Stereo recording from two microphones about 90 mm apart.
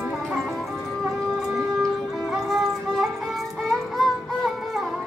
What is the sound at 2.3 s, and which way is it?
Music, centre (ahead or behind).